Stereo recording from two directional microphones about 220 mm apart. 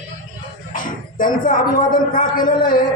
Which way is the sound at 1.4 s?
35° left (ahead or behind).